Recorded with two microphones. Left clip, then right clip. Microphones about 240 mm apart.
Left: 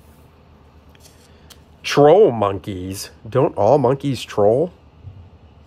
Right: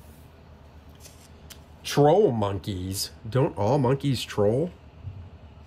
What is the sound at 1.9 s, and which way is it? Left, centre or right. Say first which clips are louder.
Speech: left 8 dB; left.